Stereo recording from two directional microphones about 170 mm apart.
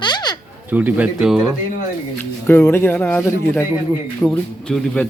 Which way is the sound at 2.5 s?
15° left (ahead or behind).